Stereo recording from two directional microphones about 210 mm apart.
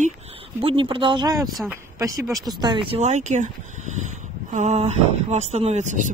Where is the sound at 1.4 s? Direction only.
Centre (ahead or behind).